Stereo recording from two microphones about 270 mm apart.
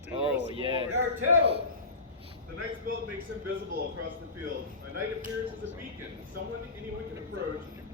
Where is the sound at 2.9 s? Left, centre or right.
Right.